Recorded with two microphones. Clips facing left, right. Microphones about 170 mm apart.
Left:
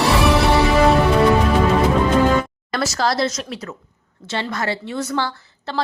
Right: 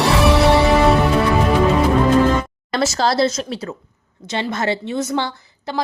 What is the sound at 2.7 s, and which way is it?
Speech, 25° right (ahead or behind).